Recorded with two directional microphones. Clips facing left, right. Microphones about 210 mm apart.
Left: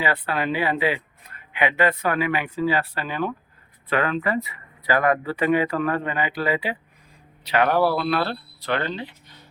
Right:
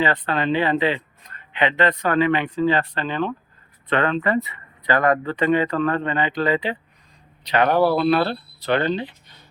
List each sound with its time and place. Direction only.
0.0 s speech: 10° left (ahead or behind)
8.0 s speech: 30° right (ahead or behind)